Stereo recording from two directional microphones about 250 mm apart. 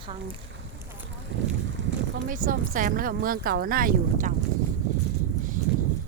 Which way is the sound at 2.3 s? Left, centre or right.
Right.